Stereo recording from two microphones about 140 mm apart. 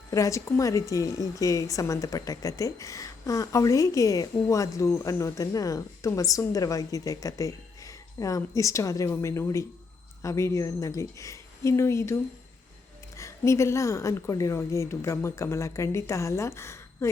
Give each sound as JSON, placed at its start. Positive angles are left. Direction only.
{"t": 0.1, "sound": "a woman's voice", "side_deg": 20}
{"t": 13.1, "sound": "a woman's voice", "side_deg": 20}